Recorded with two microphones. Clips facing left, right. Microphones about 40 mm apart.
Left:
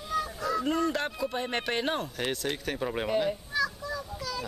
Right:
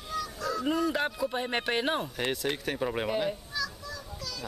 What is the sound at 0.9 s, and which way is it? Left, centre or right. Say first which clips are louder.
Speech: right 1 dB; centre.